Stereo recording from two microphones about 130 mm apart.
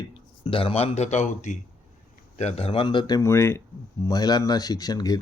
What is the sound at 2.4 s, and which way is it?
Speech, 50° left (ahead or behind).